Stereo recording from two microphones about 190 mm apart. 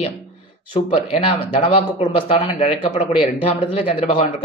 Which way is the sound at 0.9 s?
30° left (ahead or behind).